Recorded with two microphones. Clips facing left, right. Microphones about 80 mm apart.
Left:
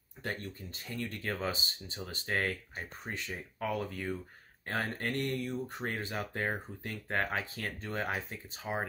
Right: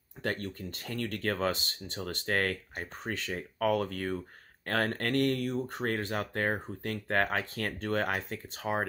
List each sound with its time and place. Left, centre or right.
0.2 s speech: right